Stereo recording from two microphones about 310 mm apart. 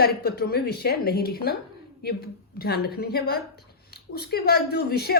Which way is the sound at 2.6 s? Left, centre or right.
Left.